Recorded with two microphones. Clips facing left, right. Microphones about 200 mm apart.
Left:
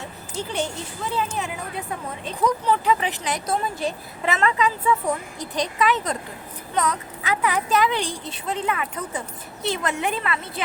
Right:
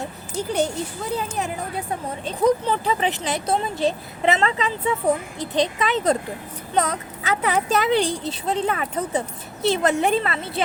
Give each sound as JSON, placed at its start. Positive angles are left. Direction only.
{"t": 0.0, "sound": "a sound", "side_deg": -40}
{"t": 1.0, "sound": "a woman's voice", "side_deg": -40}
{"t": 2.6, "sound": "a child's voice", "side_deg": -30}